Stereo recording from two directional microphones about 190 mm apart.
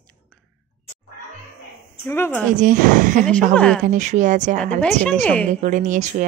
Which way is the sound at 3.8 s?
40° right (ahead or behind).